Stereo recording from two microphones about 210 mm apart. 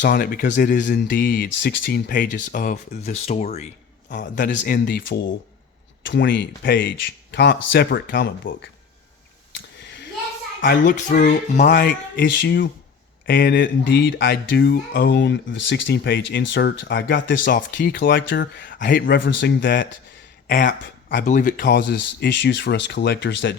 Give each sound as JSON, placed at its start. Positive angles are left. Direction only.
{"t": 0.0, "sound": "speech", "side_deg": 45}
{"t": 6.0, "sound": "speech", "side_deg": 55}
{"t": 9.6, "sound": "a sound", "side_deg": 55}
{"t": 10.6, "sound": "speech", "side_deg": 40}
{"t": 17.4, "sound": "speech", "side_deg": 45}
{"t": 18.7, "sound": "speech", "side_deg": 40}
{"t": 20.5, "sound": "speech", "side_deg": 40}